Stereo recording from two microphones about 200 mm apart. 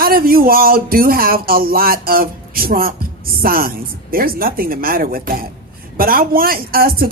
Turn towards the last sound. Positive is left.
turn(degrees=-45)  # may be behind; listen again after turning